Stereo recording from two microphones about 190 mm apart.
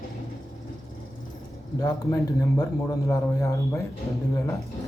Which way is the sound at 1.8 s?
15° left (ahead or behind).